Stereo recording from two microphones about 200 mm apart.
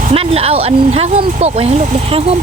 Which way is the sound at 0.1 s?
30° right (ahead or behind).